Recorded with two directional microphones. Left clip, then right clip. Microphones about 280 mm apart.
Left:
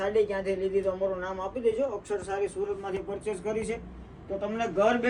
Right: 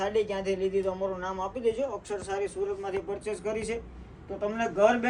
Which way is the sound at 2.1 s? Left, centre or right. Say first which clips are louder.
Left 1 dB; centre.